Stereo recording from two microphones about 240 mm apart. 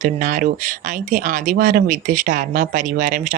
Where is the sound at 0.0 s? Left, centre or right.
Right.